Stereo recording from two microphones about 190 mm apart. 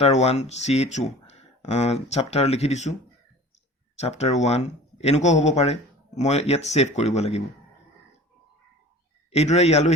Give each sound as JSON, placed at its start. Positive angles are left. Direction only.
{"t": 0.0, "sound": "speech", "side_deg": 35}
{"t": 3.9, "sound": "speech", "side_deg": 35}
{"t": 9.3, "sound": "speech", "side_deg": 35}